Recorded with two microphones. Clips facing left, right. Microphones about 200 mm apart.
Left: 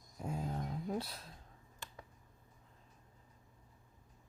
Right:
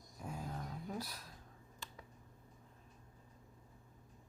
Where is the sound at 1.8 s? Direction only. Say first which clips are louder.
Left 1 dB; 50° left (ahead or behind).